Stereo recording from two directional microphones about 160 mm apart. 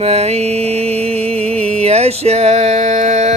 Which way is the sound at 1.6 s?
40° right (ahead or behind).